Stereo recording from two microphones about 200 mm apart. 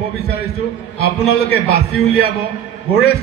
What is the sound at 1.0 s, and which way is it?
Speech, 50° left (ahead or behind).